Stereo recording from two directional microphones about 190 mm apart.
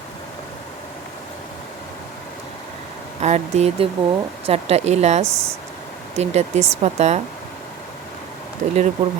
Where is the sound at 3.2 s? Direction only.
35° right (ahead or behind).